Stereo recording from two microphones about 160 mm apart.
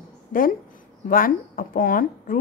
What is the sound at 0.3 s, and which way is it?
A woman's voice, 60° left (ahead or behind).